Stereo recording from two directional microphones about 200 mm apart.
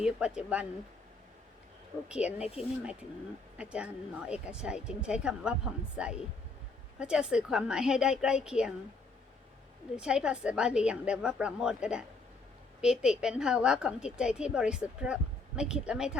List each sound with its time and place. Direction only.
0.0 s a woman's voice: 5° right (ahead or behind)
2.0 s a woman's voice: 5° right (ahead or behind)
2.6 s speech: 30° left (ahead or behind)
3.6 s a woman's voice: 5° right (ahead or behind)
9.9 s a woman's voice: 5° right (ahead or behind)